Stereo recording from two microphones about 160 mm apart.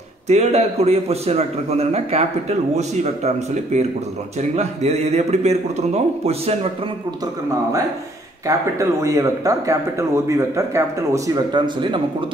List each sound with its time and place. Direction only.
0.3 s a man's voice: 40° right (ahead or behind)
8.5 s speech: 20° right (ahead or behind)